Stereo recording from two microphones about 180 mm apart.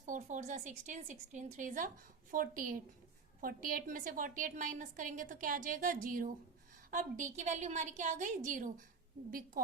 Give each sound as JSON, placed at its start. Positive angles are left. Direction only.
{"t": 0.0, "sound": "a woman's voice", "side_deg": -45}